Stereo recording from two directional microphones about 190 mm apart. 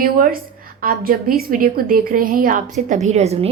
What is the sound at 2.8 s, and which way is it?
Speech, 35° right (ahead or behind).